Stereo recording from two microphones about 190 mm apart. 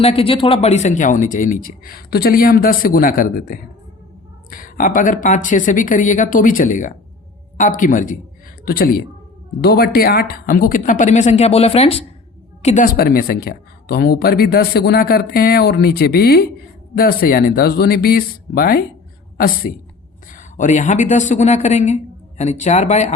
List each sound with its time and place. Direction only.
0.0 s speech: 30° left (ahead or behind)
12.6 s speech: 45° left (ahead or behind)
20.3 s speech: 40° left (ahead or behind)